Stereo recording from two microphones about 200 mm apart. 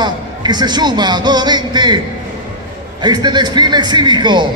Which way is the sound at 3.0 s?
20° right (ahead or behind).